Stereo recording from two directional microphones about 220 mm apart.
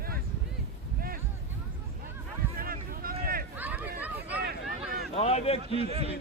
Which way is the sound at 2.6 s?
40° right (ahead or behind).